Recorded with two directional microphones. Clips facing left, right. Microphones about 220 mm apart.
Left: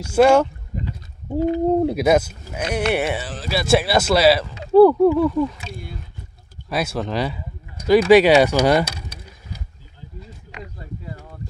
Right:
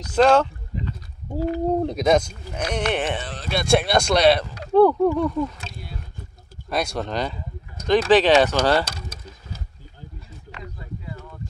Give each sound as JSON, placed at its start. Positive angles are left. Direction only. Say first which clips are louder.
{"t": 0.0, "sound": "speech", "louder": "left 3 dB", "side_deg": 10}
{"t": 1.8, "sound": "speech", "louder": "left 2 dB", "side_deg": 5}
{"t": 5.7, "sound": "a sound", "louder": "left 5 dB", "side_deg": 50}
{"t": 6.7, "sound": "speech", "louder": "left 2 dB", "side_deg": 5}